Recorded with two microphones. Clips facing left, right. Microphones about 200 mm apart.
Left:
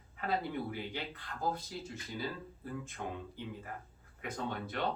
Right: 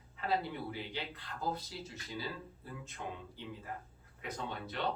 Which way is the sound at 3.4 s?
50° left (ahead or behind).